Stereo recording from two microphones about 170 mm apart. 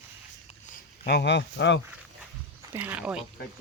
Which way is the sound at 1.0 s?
75° left (ahead or behind).